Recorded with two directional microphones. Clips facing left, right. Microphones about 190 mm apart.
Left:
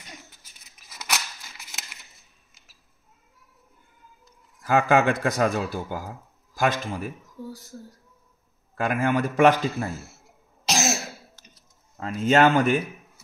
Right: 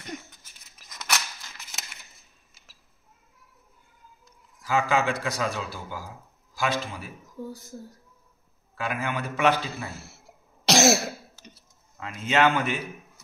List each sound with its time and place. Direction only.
0.8 s scissors: 5° left (ahead or behind)
4.6 s speech: 55° left (ahead or behind)
8.7 s speech: 50° left (ahead or behind)
10.6 s cough: 70° right (ahead or behind)
12.0 s speech: 40° left (ahead or behind)